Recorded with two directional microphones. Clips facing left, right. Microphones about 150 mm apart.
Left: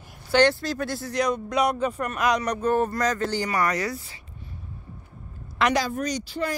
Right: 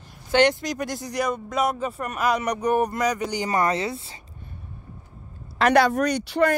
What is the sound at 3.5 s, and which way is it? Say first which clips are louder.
Speech: right 2 dB; 25° right (ahead or behind).